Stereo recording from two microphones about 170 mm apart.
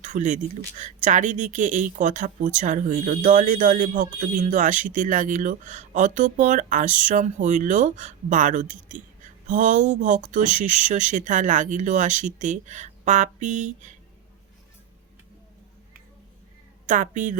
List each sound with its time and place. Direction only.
0.0 s speech: 45° right (ahead or behind)
16.8 s speech: 45° right (ahead or behind)